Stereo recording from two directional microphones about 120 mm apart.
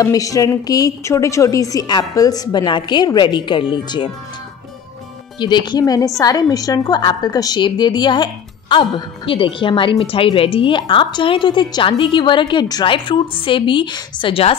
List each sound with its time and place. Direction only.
0.0 s a woman's voice: 30° left (ahead or behind)
5.4 s a woman's voice: 40° left (ahead or behind)